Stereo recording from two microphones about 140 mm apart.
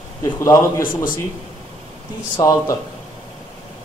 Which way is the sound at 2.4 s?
25° left (ahead or behind).